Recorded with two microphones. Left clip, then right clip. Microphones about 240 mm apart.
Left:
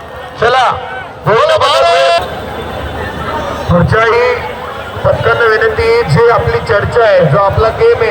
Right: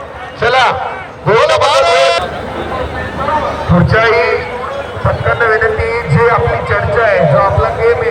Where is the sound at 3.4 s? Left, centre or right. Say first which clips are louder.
Left 1 dB; centre.